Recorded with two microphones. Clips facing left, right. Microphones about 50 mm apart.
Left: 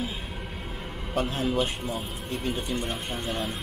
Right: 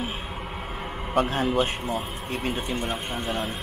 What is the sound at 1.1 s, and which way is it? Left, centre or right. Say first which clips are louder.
Speech: right 4 dB; right.